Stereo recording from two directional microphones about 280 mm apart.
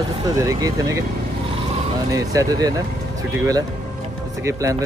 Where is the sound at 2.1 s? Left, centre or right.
Centre.